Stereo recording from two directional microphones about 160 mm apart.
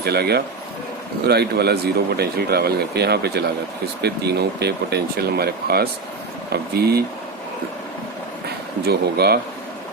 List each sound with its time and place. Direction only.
0.0 s speech: 90° right
8.8 s speech: 85° right